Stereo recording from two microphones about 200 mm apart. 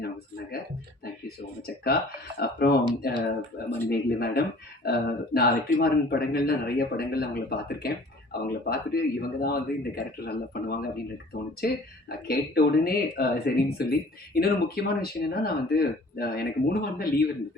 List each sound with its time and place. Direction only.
1.6 s speech: 50° left (ahead or behind)